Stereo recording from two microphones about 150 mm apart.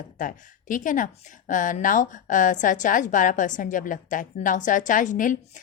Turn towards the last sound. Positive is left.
turn(degrees=60)  # may be behind; listen again after turning